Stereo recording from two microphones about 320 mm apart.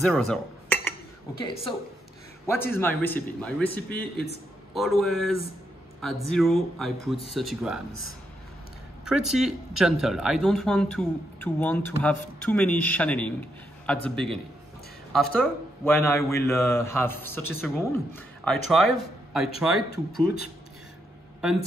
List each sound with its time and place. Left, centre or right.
0.0 s dishes: centre
1.4 s a man's voice: centre
3.9 s a man's voice: left
4.7 s speech: centre
9.0 s speech: centre
15.3 s a man's voice: centre
19.9 s speech: left
21.4 s speech: centre